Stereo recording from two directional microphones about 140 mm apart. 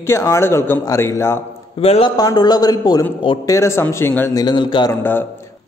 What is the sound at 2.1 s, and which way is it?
A man's voice, 30° left (ahead or behind).